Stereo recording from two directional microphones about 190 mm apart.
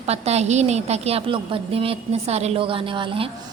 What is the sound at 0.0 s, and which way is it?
A woman's voice, 35° right (ahead or behind).